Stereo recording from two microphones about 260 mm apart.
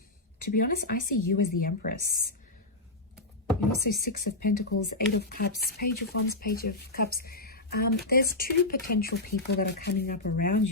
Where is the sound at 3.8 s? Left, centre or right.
Left.